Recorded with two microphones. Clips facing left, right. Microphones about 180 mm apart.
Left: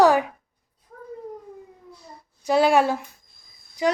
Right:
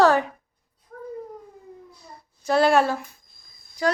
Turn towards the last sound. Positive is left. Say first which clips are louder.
# left 1 dB
turn(degrees=20)  # may be behind; listen again after turning